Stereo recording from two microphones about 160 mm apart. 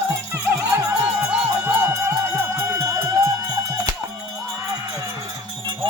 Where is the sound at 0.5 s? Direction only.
20° right (ahead or behind).